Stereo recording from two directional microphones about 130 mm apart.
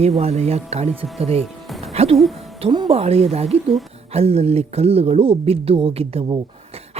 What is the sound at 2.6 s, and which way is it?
Speech, 40° right (ahead or behind).